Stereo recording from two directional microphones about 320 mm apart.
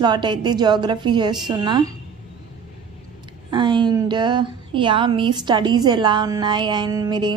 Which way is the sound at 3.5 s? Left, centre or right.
Centre.